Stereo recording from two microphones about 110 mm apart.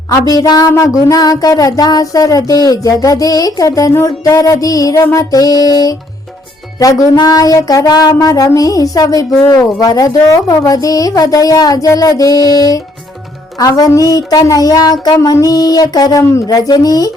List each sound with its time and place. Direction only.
0.1 s speech: 35° left (ahead or behind)